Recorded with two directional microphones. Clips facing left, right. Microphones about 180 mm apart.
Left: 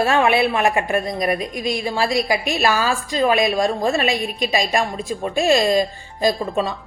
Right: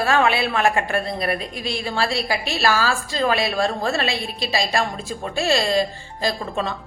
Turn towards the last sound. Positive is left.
turn(degrees=15)  # may be behind; listen again after turning